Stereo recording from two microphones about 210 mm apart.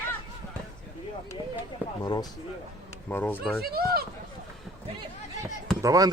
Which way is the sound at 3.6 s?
45° right (ahead or behind).